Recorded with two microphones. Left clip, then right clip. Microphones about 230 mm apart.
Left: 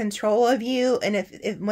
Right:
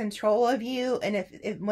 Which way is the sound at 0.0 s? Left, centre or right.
Left.